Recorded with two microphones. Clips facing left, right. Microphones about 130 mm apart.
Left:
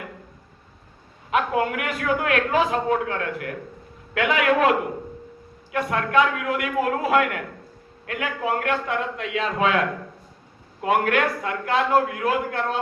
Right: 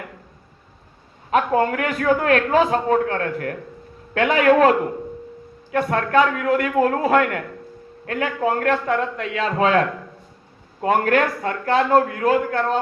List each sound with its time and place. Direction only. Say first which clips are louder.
1.3 s a man's voice: right 4 dB; 40° right (ahead or behind)
5.7 s a man's voice: right 3 dB; 40° right (ahead or behind)